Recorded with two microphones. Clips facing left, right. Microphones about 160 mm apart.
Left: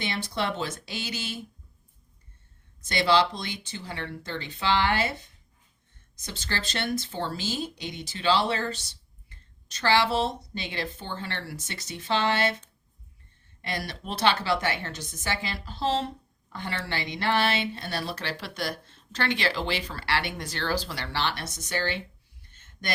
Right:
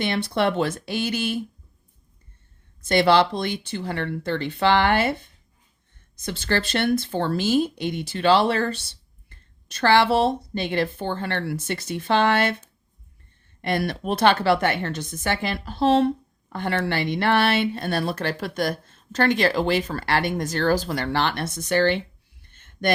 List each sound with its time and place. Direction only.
0.0 s a woman's voice: 60° right (ahead or behind)
2.8 s a woman's voice: 55° right (ahead or behind)
22.5 s a sound: 55° right (ahead or behind)